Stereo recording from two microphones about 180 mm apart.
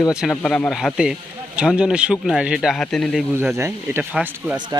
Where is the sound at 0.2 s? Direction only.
5° left (ahead or behind).